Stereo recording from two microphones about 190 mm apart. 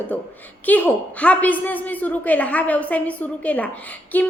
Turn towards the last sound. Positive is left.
turn(degrees=10)  # may be behind; listen again after turning